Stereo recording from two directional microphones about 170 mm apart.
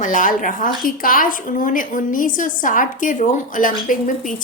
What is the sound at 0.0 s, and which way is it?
A woman's voice, 50° left (ahead or behind).